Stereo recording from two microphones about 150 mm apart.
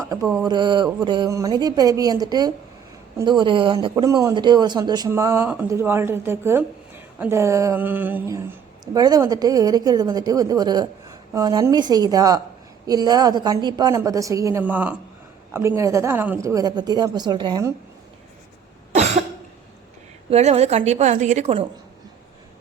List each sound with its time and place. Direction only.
0.4 s a woman's voice: 30° right (ahead or behind)
14.6 s a woman's voice: 10° right (ahead or behind)
20.3 s speech: 45° right (ahead or behind)